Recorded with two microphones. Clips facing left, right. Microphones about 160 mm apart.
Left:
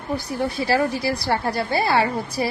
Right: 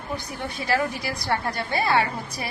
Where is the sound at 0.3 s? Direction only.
30° left (ahead or behind).